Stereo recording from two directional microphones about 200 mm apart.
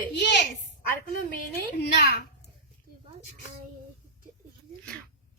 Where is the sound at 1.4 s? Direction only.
50° left (ahead or behind).